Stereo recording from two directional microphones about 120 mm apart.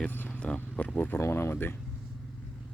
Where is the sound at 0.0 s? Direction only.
10° left (ahead or behind).